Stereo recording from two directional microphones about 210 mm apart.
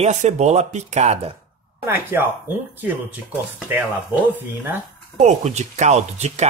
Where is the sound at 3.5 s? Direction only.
10° right (ahead or behind).